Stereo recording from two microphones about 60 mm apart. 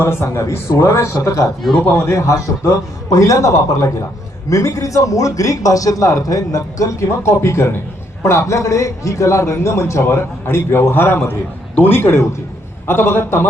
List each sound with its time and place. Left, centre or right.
0.0 s a man's voice: left